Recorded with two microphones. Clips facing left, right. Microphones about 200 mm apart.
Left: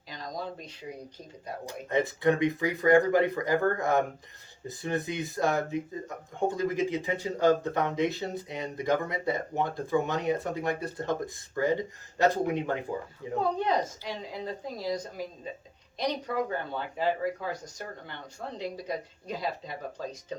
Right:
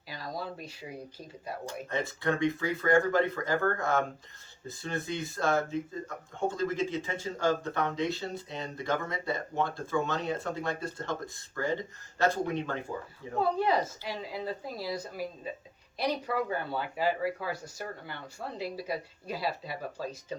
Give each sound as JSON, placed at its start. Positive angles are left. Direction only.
{"t": 0.1, "sound": "a sound", "side_deg": -5}
{"t": 1.6, "sound": "speech", "side_deg": 20}
{"t": 13.4, "sound": "speech", "side_deg": -5}